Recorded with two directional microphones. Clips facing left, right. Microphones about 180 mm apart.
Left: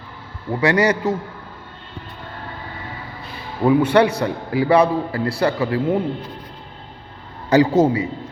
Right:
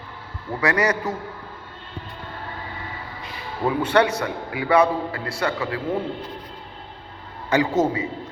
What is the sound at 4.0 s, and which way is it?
A man's voice, 30° left (ahead or behind).